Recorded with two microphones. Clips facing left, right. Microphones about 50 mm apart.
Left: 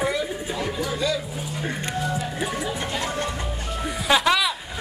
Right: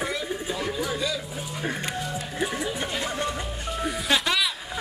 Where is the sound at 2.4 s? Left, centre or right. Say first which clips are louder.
Left 1 dB; centre.